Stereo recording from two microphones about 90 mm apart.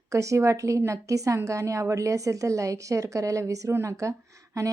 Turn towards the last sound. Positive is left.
turn(degrees=-35)  # may be behind; listen again after turning